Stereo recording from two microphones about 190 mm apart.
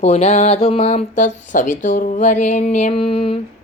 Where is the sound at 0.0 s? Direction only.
35° left (ahead or behind).